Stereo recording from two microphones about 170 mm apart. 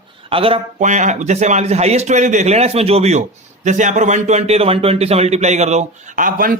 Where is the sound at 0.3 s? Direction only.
35° right (ahead or behind).